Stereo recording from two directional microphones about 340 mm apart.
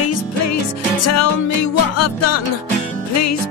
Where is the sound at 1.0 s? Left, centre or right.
Left.